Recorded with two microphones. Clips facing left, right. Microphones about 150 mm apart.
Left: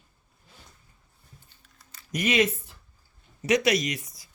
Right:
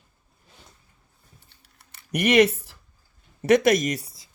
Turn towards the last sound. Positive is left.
turn(degrees=-25)  # may be behind; listen again after turning